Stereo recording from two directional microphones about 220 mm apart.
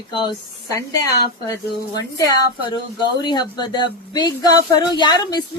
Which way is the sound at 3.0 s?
20° left (ahead or behind).